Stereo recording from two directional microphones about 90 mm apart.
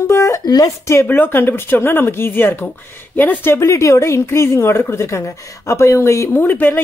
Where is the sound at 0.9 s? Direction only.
25° left (ahead or behind).